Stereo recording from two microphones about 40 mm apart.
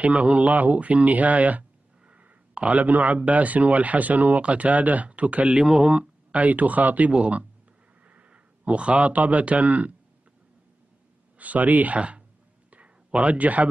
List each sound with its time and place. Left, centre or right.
0.0 s speech: right
5.6 s speech: right
7.1 s speech: right
11.3 s speech: right
12.7 s a sound: right